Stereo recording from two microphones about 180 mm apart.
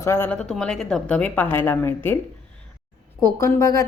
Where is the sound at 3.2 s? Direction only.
15° left (ahead or behind).